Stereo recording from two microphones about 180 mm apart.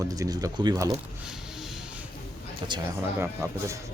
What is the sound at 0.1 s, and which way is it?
Speech, 20° right (ahead or behind).